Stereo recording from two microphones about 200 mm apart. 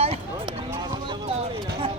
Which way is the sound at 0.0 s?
30° right (ahead or behind).